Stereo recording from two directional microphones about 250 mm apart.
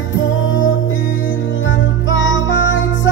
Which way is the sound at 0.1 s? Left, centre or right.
Left.